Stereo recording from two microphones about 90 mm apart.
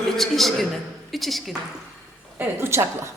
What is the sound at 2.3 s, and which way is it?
Speech, 30° right (ahead or behind).